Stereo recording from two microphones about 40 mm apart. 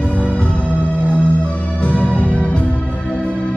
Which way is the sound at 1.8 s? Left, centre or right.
Left.